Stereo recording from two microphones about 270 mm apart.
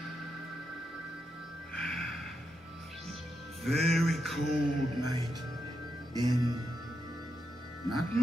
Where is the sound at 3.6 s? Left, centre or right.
Centre.